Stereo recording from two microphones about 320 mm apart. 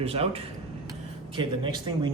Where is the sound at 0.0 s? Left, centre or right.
Centre.